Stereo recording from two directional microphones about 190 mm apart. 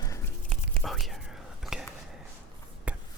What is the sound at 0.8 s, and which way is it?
Whispering, centre (ahead or behind).